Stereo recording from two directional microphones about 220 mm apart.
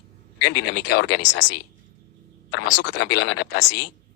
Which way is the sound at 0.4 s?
50° left (ahead or behind).